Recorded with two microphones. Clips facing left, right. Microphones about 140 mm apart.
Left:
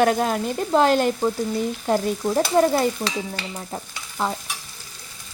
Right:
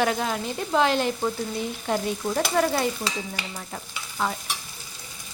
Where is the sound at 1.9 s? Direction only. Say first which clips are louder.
Left 4 dB; 35° left (ahead or behind).